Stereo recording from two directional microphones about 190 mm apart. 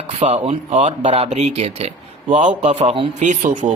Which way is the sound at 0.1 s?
35° right (ahead or behind).